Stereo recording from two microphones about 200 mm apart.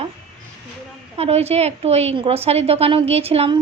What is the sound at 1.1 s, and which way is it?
A woman's voice, 30° right (ahead or behind).